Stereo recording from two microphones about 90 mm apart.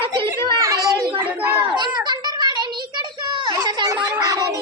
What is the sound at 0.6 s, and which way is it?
Children playing, 40° right (ahead or behind).